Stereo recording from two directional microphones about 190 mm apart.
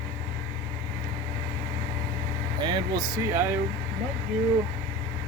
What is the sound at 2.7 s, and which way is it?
Speech, 20° right (ahead or behind).